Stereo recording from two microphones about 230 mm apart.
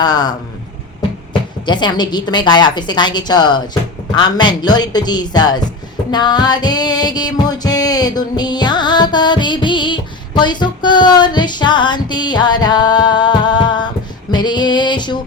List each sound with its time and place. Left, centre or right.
0.0 s speech: centre
1.6 s music: centre
4.1 s speech: centre
6.1 s music: centre